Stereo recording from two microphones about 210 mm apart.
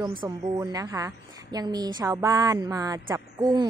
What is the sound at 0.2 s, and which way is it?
A woman's voice, 15° right (ahead or behind).